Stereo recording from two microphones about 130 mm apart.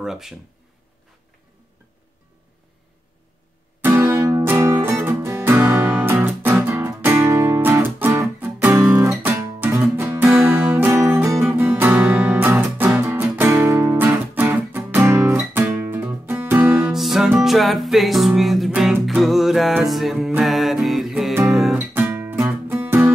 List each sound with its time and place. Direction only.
0.0 s speech: 5° right (ahead or behind)
3.9 s music: 15° right (ahead or behind); by 21.7 s centre (ahead or behind)
21.7 s music: 15° right (ahead or behind)